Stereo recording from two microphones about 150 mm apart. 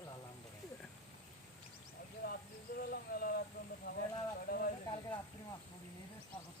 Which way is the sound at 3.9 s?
90° left.